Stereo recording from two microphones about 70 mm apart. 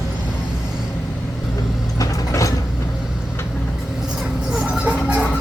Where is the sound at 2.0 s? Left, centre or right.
Left.